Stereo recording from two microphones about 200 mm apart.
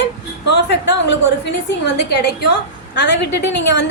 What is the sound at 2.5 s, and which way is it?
A woman's voice, 60° left (ahead or behind).